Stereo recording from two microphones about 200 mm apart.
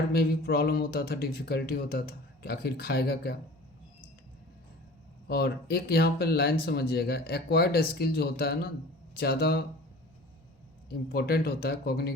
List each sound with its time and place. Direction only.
0.1 s speech: 50° left (ahead or behind)
5.3 s speech: 50° left (ahead or behind)
11.1 s speech: 50° left (ahead or behind)